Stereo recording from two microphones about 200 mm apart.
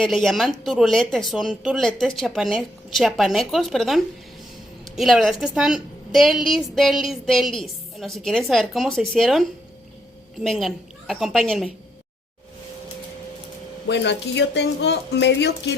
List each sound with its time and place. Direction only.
0.0 s a woman's voice: centre (ahead or behind)
13.8 s speech: 60° left (ahead or behind)